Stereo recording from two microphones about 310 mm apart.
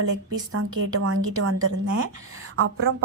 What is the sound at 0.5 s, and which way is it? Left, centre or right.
A woman's voice, right.